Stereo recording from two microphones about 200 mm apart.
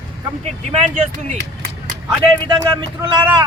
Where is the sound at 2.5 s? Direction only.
20° right (ahead or behind).